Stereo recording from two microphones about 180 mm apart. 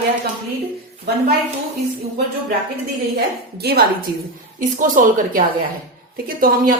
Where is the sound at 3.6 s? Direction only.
65° right (ahead or behind).